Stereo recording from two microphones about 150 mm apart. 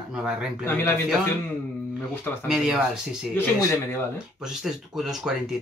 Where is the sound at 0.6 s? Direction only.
15° left (ahead or behind).